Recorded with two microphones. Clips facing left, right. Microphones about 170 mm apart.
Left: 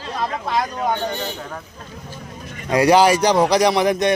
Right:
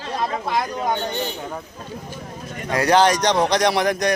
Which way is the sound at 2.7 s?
10° left (ahead or behind).